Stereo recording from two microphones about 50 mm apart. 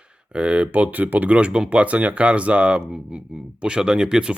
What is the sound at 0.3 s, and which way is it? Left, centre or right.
Speech, right.